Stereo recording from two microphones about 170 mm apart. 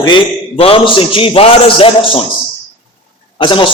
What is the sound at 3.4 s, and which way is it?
Speech, 30° left (ahead or behind).